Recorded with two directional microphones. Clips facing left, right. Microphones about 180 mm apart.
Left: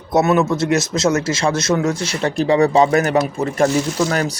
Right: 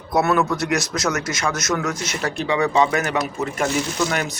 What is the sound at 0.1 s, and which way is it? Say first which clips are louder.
Speech: left 4 dB; 25° left (ahead or behind).